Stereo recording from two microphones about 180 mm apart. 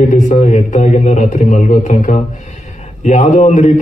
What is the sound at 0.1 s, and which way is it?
A man's voice, 45° left (ahead or behind).